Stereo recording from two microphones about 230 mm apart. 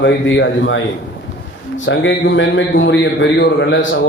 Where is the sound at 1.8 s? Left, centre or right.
Left.